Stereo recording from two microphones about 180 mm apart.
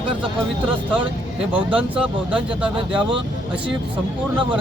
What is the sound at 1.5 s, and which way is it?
Speech, 5° right (ahead or behind).